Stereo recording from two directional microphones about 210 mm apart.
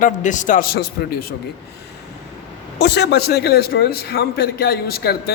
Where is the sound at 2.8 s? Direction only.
55° left (ahead or behind).